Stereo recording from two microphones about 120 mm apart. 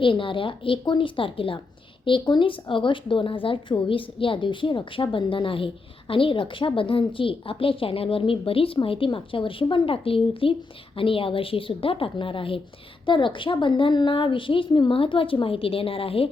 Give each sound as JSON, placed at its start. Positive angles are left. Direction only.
{"t": 0.0, "sound": "speech", "side_deg": 45}